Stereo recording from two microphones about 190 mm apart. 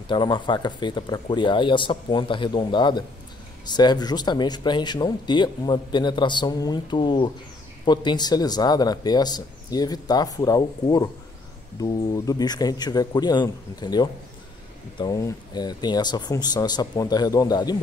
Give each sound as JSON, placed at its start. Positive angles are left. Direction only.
{"t": 0.1, "sound": "speech", "side_deg": 25}